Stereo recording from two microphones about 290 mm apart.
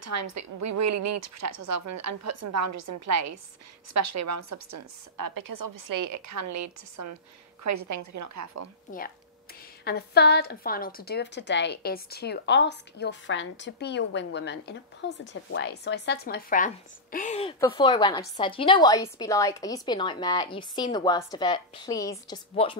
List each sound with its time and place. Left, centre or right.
0.0 s a woman's voice: right
9.8 s a woman's voice: left; by 22.8 s centre